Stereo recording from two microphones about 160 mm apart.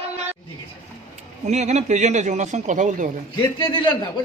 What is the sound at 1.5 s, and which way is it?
A man's voice, 45° right (ahead or behind).